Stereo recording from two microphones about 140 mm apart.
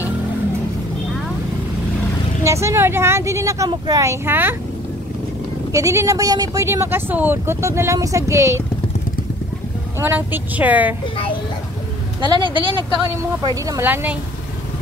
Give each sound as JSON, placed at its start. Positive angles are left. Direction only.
{"t": 2.4, "sound": "speech", "side_deg": -20}
{"t": 5.7, "sound": "speech", "side_deg": -25}
{"t": 9.9, "sound": "a woman's voice", "side_deg": -15}
{"t": 12.4, "sound": "speech", "side_deg": -35}
{"t": 13.7, "sound": "a woman's voice", "side_deg": -15}